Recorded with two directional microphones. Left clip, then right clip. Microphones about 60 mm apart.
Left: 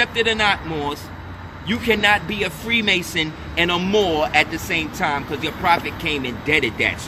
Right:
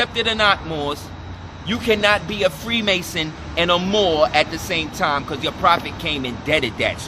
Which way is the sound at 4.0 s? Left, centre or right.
Right.